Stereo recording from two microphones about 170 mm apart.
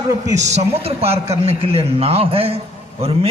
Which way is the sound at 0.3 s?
40° right (ahead or behind).